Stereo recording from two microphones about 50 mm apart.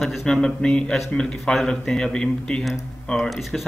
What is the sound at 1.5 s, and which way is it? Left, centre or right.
Speech, centre.